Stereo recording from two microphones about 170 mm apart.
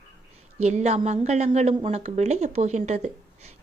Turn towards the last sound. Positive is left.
turn(degrees=-40)  # may be behind; listen again after turning